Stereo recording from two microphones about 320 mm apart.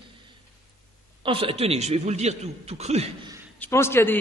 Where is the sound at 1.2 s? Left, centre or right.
Centre.